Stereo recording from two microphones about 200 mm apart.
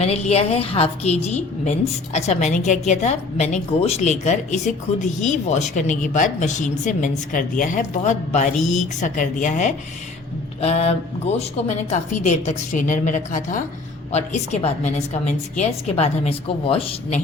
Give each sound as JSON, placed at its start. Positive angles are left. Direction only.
{"t": 0.0, "sound": "a woman's voice", "side_deg": 30}